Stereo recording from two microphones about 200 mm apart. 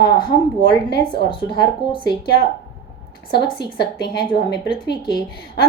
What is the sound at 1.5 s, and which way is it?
A woman's voice, 55° left (ahead or behind).